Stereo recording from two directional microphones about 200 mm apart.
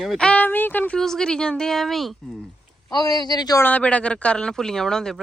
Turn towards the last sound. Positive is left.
turn(degrees=5)  # may be behind; listen again after turning